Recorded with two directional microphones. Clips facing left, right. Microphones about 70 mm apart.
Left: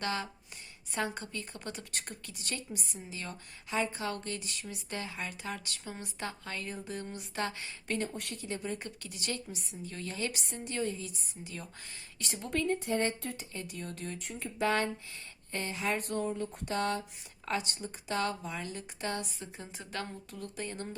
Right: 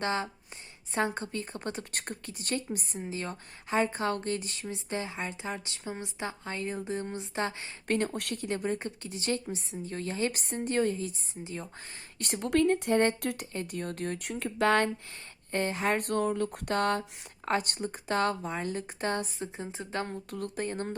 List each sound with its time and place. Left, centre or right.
0.0 s a woman's voice: right
7.9 s speech: right
8.8 s a woman's voice: right
11.1 s a woman's voice: right
12.2 s speech: right
13.5 s speech: right
15.5 s a woman's voice: right
19.4 s a woman's voice: right
20.1 s a woman's voice: right